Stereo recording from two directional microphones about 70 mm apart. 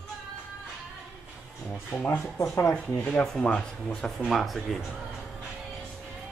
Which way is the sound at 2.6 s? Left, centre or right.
Centre.